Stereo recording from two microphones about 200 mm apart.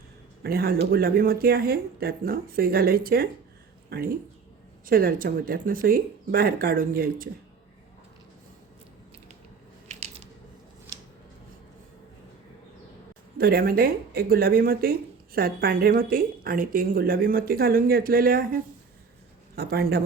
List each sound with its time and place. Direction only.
0.4 s speech: 50° right (ahead or behind)
9.9 s a sound: 35° right (ahead or behind)
13.4 s speech: 50° right (ahead or behind)